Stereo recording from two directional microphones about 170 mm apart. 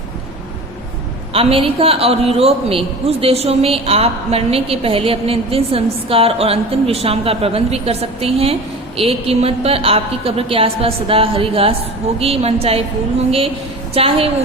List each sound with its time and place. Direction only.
1.3 s a man's voice: 35° right (ahead or behind)
13.9 s a man's voice: 35° right (ahead or behind)